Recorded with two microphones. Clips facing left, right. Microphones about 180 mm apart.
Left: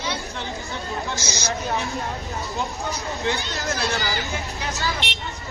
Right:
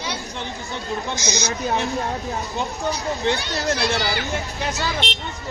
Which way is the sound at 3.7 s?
70° right (ahead or behind).